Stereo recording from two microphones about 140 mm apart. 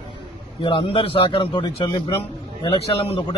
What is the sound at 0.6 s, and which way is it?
A man's voice, 40° left (ahead or behind).